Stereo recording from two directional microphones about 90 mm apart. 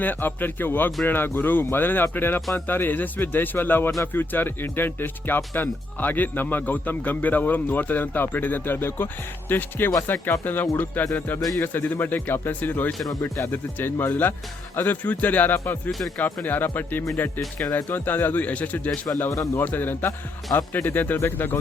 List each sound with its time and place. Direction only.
0.0 s speech: 20° left (ahead or behind)
15.9 s speech: centre (ahead or behind)
16.1 s speech: 20° left (ahead or behind)
19.3 s speech: 35° left (ahead or behind)
19.6 s speech: 25° left (ahead or behind)